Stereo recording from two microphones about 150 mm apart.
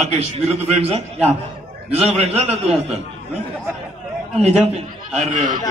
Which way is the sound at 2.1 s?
45° right (ahead or behind).